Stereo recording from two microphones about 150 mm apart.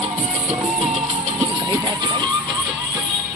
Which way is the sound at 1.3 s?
20° right (ahead or behind).